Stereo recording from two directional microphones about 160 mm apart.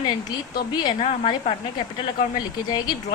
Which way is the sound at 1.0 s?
50° left (ahead or behind).